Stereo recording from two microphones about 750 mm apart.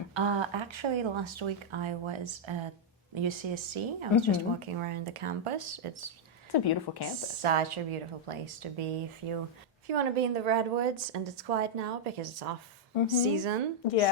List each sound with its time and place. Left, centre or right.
0.1 s speech: right
6.5 s a woman's voice: left
7.4 s speech: right
9.8 s a woman's voice: right
13.1 s a woman's voice: right
13.8 s a woman's voice: left